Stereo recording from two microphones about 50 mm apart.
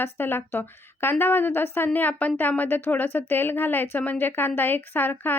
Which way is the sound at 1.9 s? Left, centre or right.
Left.